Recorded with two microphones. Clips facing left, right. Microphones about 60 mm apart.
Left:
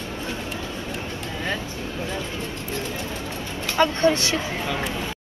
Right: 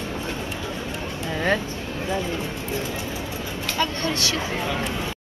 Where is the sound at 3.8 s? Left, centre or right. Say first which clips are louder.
Left 7 dB; left.